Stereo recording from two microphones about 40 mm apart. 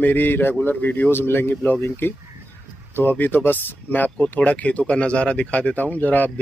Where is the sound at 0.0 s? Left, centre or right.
Left.